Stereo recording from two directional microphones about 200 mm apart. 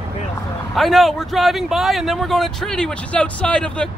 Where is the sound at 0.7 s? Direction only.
Centre (ahead or behind).